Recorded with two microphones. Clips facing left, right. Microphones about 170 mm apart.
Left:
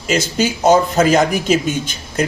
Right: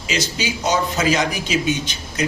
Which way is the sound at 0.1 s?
50° left (ahead or behind).